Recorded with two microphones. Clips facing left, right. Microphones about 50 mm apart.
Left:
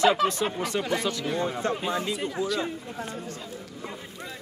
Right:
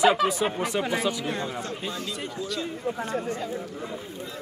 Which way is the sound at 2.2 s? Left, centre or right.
Centre.